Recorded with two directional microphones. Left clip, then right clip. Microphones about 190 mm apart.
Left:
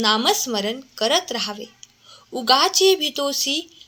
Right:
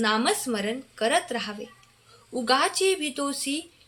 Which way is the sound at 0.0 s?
25° left (ahead or behind).